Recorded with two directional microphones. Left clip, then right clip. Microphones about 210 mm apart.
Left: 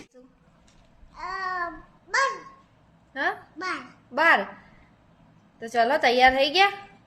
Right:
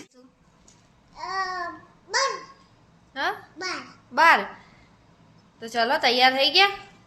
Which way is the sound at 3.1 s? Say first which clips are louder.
Even; 15° left (ahead or behind).